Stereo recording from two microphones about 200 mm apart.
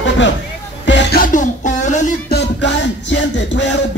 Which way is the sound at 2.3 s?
60° left (ahead or behind).